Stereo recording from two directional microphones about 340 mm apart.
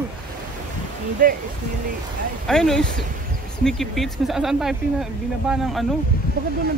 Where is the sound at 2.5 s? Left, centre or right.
Centre.